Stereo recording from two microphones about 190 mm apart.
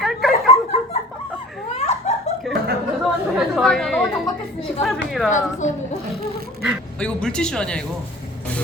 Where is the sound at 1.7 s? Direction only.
35° left (ahead or behind).